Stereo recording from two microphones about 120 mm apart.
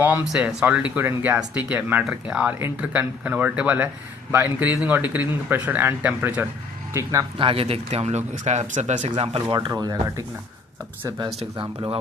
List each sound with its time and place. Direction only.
0.3 s speech: 10° right (ahead or behind)
6.9 s speech: 25° right (ahead or behind)
7.3 s speech: 50° right (ahead or behind)
9.6 s speech: 30° right (ahead or behind)
11.5 s speech: 40° right (ahead or behind)